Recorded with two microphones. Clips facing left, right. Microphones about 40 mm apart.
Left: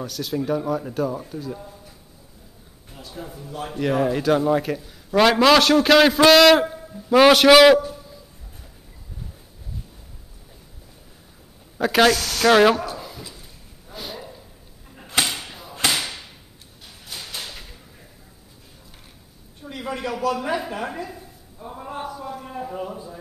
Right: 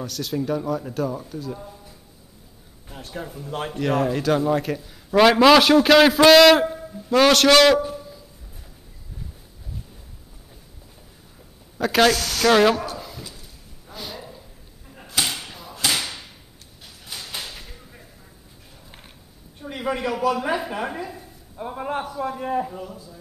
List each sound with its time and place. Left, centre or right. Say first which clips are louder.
0.0 s a man's voice: even; centre
2.9 s a sound: right 3 dB; right
3.7 s a man's voice: left 1 dB; centre
7.1 s a man's voice: left 3 dB; centre
11.8 s speech: left 1 dB; centre
13.9 s a sound: left 1 dB; centre
17.4 s a sound: even; centre
19.6 s speech: right 3 dB; centre
21.6 s a man's voice: right 5 dB; right
22.7 s speech: left 4 dB; left